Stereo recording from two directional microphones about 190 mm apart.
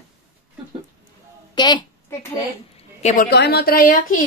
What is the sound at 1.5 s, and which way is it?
Speech, 20° left (ahead or behind).